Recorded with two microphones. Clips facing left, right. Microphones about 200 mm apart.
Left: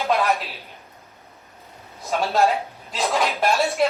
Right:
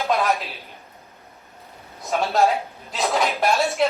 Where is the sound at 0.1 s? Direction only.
Centre (ahead or behind).